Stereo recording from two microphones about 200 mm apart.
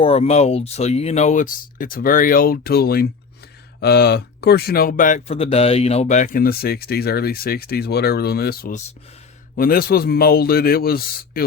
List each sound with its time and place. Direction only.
0.0 s speech: 30° left (ahead or behind); by 11.4 s 50° left (ahead or behind)